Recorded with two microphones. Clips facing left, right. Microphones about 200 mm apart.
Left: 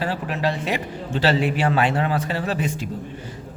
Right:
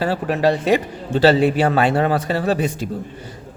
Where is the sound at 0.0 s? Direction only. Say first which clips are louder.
Right 6 dB; 40° right (ahead or behind).